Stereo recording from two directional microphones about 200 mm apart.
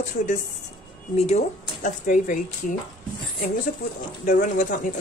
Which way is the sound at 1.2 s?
35° left (ahead or behind).